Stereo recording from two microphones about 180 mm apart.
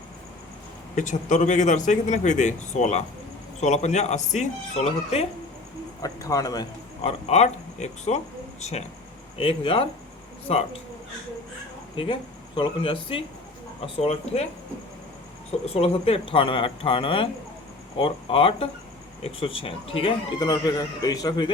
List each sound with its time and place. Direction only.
0.9 s speech: 45° left (ahead or behind)
6.0 s speech: 20° left (ahead or behind)
7.0 s speech: 35° left (ahead or behind)
9.4 s speech: 30° left (ahead or behind)
11.9 s speech: 30° left (ahead or behind)
15.6 s speech: 30° left (ahead or behind)